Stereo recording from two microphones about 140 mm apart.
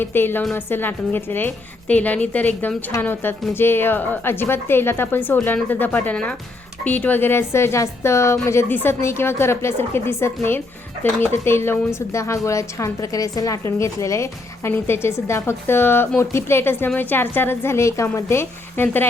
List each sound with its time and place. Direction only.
0.0 s a woman's voice: 15° left (ahead or behind)